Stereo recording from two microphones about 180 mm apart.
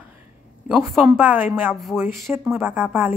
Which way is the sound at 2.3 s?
10° right (ahead or behind).